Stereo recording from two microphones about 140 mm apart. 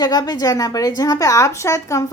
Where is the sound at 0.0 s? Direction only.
25° left (ahead or behind).